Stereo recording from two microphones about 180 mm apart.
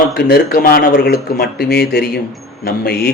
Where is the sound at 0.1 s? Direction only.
60° left (ahead or behind).